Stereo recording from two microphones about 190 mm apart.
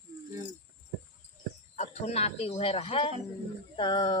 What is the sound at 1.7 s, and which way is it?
Speech, 35° left (ahead or behind).